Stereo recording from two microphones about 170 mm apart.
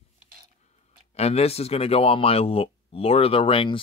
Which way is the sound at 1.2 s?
35° left (ahead or behind).